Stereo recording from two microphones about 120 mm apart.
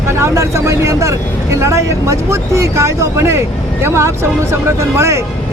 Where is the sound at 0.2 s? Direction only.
25° right (ahead or behind).